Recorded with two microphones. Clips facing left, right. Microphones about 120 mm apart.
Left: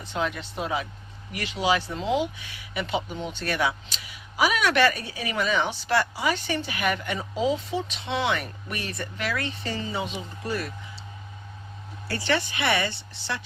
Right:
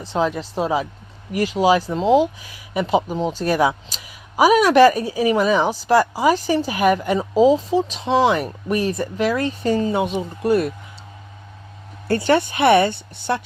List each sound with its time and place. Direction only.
0.0 s speech: 35° right (ahead or behind); by 10.7 s 55° right (ahead or behind)
12.0 s a woman's voice: 50° right (ahead or behind)